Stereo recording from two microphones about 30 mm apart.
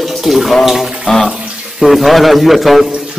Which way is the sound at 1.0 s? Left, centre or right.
Centre.